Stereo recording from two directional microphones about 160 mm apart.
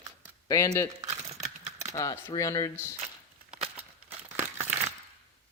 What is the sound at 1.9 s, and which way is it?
Speech, 20° left (ahead or behind).